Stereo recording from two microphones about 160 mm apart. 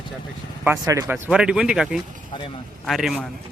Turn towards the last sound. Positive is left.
turn(degrees=0)  # may be behind; listen again after turning